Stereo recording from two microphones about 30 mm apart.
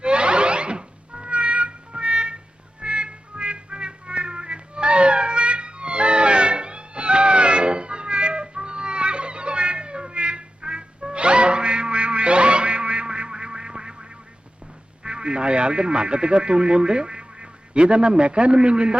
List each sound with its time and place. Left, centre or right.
0.0 s music: right
15.0 s speech: right